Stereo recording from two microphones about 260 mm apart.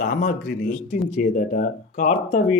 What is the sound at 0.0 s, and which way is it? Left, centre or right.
Speech, left.